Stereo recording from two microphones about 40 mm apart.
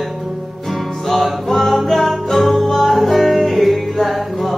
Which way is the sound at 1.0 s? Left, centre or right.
Centre.